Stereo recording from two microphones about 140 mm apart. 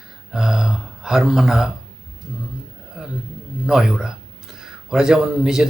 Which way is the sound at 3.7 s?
5° right (ahead or behind).